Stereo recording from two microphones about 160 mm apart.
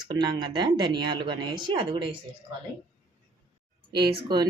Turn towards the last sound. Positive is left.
turn(degrees=-25)  # may be behind; listen again after turning